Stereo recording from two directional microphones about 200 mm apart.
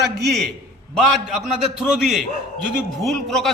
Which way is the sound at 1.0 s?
Centre (ahead or behind).